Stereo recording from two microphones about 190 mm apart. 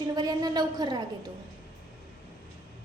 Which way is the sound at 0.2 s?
20° right (ahead or behind).